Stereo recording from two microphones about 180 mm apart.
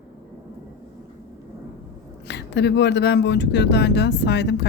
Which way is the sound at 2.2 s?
70° left (ahead or behind).